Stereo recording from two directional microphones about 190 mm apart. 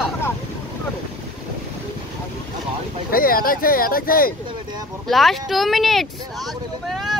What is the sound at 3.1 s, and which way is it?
Speech, 50° left (ahead or behind).